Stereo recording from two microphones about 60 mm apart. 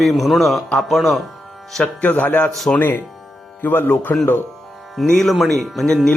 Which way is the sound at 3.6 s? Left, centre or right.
Left.